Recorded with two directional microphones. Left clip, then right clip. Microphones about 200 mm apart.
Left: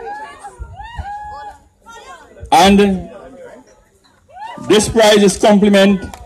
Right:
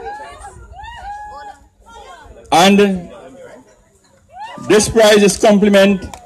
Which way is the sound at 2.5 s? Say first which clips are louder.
Left 1 dB; 35° right (ahead or behind).